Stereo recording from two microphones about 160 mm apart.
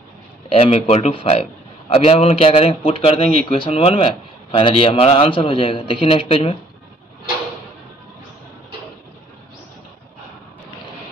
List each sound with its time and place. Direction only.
0.5 s speech: 35° left (ahead or behind)